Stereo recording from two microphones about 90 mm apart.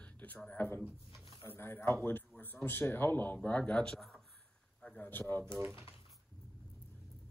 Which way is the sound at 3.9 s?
5° left (ahead or behind).